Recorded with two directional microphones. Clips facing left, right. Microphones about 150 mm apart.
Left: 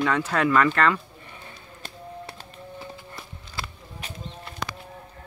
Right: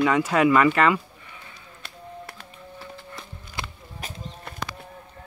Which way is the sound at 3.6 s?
20° right (ahead or behind).